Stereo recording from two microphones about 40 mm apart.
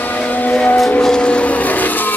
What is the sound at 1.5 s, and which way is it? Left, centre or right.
Vehicle, left.